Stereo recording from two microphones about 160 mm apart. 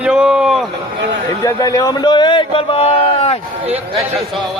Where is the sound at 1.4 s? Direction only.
20° left (ahead or behind); by 3.4 s 40° left (ahead or behind).